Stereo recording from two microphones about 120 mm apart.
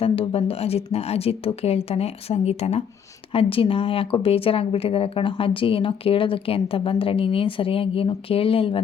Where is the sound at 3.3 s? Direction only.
50° left (ahead or behind).